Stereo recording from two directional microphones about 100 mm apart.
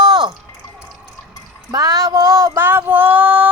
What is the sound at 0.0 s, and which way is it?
Drip, 45° right (ahead or behind).